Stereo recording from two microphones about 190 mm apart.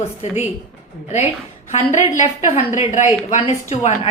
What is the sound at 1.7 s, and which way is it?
A woman's voice, 35° left (ahead or behind).